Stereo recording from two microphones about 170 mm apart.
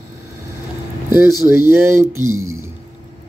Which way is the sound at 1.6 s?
15° right (ahead or behind).